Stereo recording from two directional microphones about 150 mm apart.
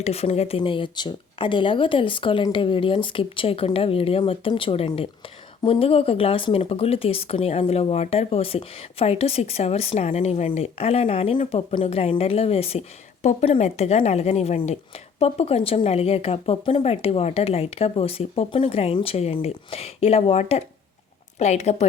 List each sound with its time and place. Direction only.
0.0 s speech: 45° left (ahead or behind)